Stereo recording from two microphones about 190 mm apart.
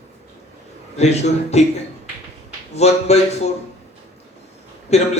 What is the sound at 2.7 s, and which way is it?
Speech, 35° left (ahead or behind).